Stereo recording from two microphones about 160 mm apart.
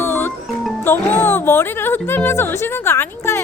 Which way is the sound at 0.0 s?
15° left (ahead or behind).